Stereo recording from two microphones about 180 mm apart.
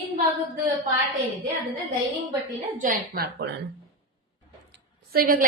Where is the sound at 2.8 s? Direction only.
55° right (ahead or behind).